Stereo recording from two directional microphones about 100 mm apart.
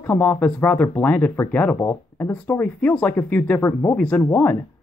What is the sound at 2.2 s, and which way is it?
Speech, 20° left (ahead or behind).